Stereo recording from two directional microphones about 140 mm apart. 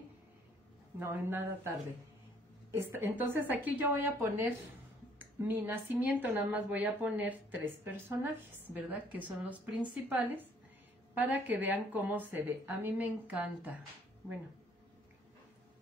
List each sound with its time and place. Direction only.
0.9 s speech: 15° right (ahead or behind)